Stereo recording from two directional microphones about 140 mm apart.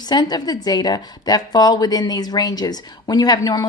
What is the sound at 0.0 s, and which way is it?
A woman's voice, 30° left (ahead or behind).